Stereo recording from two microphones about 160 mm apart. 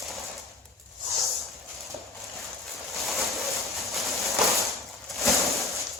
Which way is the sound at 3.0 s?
Centre (ahead or behind).